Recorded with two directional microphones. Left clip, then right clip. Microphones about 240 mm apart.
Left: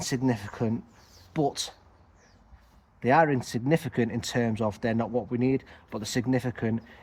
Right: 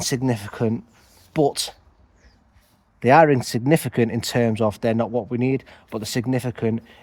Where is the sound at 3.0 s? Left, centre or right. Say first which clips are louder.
Right 8 dB; right.